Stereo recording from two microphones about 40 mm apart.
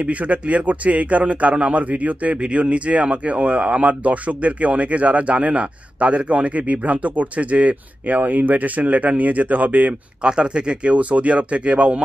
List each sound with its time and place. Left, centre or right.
0.0 s a man's voice: right
10.2 s a man's voice: right